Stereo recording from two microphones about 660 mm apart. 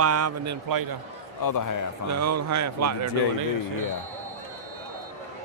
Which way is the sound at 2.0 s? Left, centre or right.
Right.